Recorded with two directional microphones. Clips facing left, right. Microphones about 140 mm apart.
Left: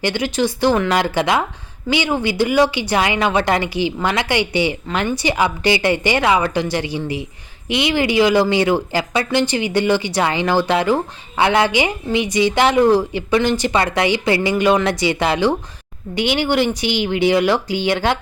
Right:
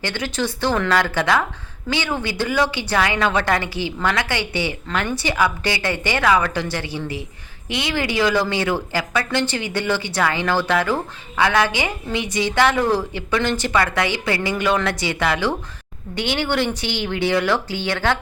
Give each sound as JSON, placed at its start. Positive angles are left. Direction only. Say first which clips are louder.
{"t": 0.0, "sound": "a woman's voice", "louder": "left 5 dB", "side_deg": 15}